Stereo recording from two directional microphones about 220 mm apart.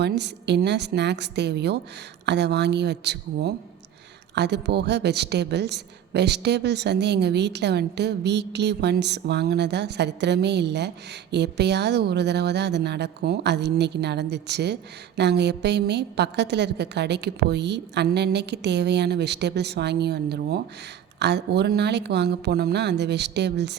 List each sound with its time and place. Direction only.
0.0 s a woman's voice: 50° right (ahead or behind)